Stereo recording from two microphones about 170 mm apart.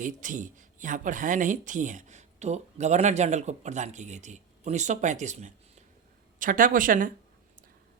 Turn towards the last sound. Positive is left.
turn(degrees=-50)  # may be behind; listen again after turning